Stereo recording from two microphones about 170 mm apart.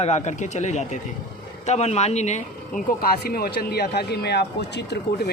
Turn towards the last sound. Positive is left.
turn(degrees=70)  # may be behind; listen again after turning